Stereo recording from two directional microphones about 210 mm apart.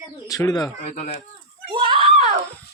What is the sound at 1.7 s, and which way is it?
Screaming, 25° right (ahead or behind).